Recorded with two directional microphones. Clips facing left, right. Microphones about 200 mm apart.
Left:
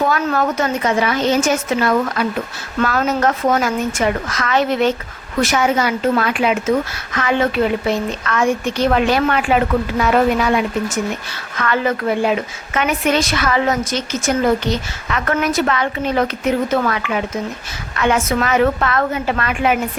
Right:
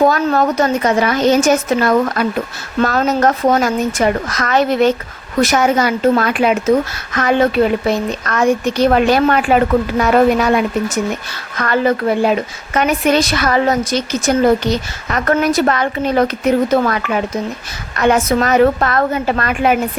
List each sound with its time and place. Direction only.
0.0 s a woman's voice: 40° right (ahead or behind)